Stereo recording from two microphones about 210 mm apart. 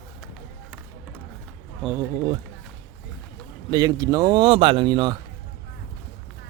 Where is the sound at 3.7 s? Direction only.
15° right (ahead or behind).